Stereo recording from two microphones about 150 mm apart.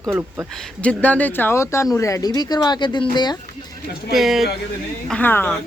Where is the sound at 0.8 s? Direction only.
10° left (ahead or behind); by 3.4 s 30° left (ahead or behind).